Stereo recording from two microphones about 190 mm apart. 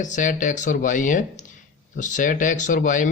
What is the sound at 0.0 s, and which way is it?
Speech, 40° left (ahead or behind).